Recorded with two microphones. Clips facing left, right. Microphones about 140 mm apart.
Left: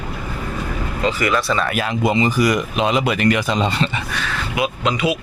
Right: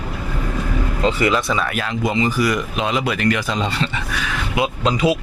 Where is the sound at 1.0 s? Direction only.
30° right (ahead or behind).